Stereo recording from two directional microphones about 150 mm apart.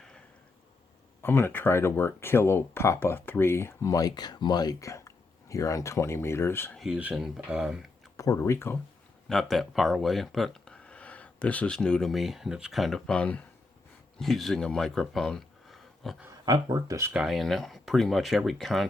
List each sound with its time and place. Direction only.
1.2 s speech: 15° left (ahead or behind)
6.7 s speech: 5° right (ahead or behind)
8.1 s speech: 20° left (ahead or behind)
9.3 s speech: centre (ahead or behind)
16.5 s speech: 25° right (ahead or behind)
17.2 s speech: centre (ahead or behind)